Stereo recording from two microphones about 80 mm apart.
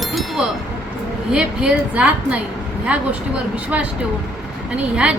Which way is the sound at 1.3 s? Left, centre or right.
Centre.